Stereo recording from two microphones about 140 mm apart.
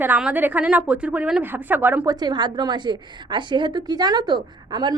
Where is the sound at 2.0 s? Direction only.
30° right (ahead or behind).